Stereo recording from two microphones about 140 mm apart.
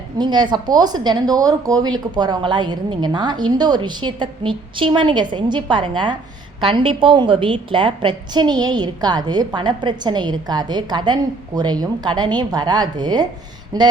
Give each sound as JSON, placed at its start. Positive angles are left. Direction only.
{"t": 0.2, "sound": "speech", "side_deg": -30}